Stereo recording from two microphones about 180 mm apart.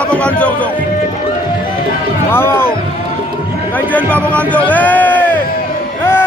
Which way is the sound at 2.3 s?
15° left (ahead or behind).